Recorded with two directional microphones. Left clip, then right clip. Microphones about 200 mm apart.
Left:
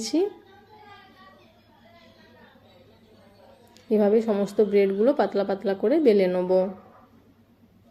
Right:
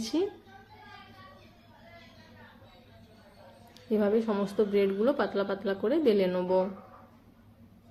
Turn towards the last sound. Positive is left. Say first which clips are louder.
# left 5 dB
turn(degrees=20)  # may be behind; listen again after turning